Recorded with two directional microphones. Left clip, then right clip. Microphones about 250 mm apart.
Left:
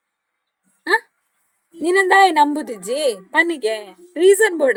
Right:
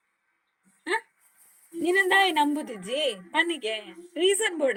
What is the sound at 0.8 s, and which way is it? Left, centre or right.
A woman's voice, centre.